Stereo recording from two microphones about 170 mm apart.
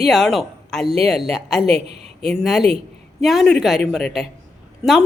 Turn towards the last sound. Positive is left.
turn(degrees=-5)  # may be behind; listen again after turning